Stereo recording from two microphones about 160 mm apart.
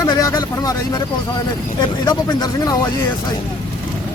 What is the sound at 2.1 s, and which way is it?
Speech, 25° left (ahead or behind).